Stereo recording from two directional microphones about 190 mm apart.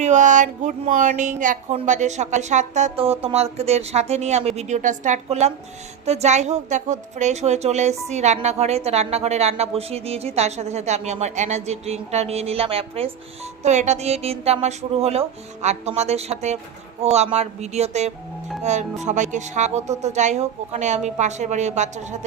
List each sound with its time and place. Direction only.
0.0 s a woman's voice: 40° right (ahead or behind)